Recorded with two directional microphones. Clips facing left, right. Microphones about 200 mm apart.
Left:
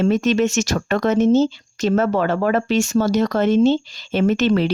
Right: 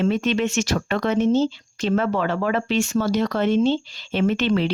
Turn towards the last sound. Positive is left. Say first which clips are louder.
# left 3 dB
turn(degrees=45)  # may be behind; listen again after turning